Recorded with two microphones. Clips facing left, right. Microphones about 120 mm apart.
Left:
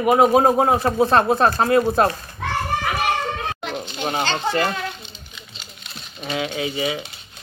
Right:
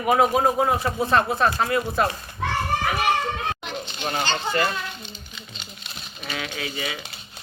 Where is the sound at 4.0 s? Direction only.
20° left (ahead or behind).